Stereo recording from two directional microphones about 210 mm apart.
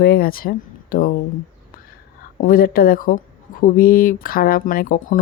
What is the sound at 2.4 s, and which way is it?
Speech, 45° left (ahead or behind).